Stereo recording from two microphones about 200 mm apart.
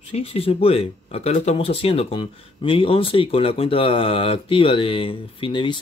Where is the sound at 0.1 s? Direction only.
30° left (ahead or behind).